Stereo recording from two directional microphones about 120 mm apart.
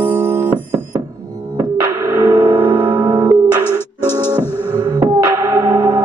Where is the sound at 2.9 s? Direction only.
40° right (ahead or behind).